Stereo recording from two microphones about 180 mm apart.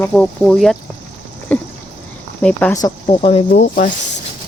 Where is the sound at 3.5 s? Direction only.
45° left (ahead or behind).